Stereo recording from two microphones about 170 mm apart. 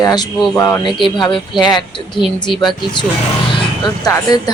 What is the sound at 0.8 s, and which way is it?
A woman's voice, 30° left (ahead or behind).